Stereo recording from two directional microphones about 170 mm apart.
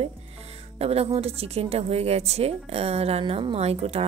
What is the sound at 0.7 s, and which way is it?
A woman's voice, 35° right (ahead or behind).